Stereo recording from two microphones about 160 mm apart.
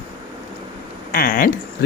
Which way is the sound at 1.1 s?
65° left (ahead or behind).